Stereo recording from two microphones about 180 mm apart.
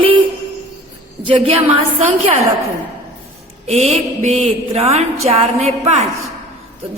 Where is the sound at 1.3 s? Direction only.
30° right (ahead or behind).